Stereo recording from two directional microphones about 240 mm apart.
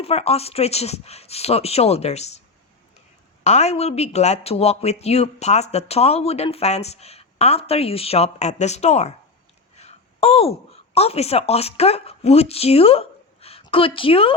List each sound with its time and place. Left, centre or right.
0.0 s speech: left
3.4 s speech: left